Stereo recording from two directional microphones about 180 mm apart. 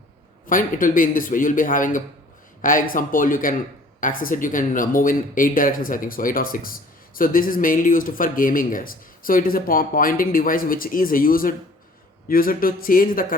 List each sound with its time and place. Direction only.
0.4 s speech: 50° left (ahead or behind)